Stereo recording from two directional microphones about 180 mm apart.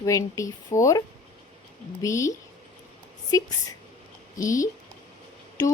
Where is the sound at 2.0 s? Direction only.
15° left (ahead or behind).